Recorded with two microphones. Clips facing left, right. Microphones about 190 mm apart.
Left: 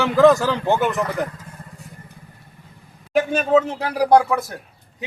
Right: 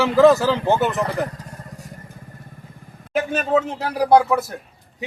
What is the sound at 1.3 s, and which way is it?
Vehicle, 40° right (ahead or behind).